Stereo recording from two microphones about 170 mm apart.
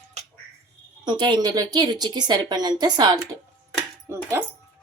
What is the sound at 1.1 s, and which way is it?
A woman's voice, 25° right (ahead or behind).